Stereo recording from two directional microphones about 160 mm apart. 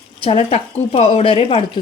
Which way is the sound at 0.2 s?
35° left (ahead or behind).